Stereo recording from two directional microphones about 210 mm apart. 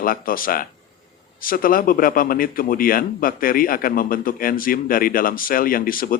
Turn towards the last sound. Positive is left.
turn(degrees=45)  # may be behind; listen again after turning